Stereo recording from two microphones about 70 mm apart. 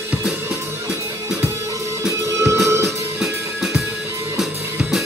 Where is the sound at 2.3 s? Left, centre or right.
Right.